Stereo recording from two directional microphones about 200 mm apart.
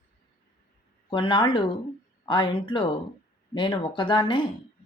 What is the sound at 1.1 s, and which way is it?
Speech, 25° left (ahead or behind).